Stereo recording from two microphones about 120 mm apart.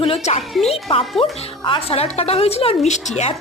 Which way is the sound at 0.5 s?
Centre (ahead or behind).